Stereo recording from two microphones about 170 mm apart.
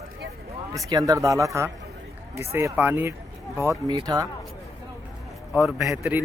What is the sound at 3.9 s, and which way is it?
Speech, 25° right (ahead or behind).